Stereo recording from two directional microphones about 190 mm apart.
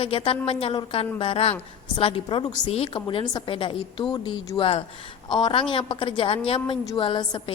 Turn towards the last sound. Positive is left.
turn(degrees=25)  # may be behind; listen again after turning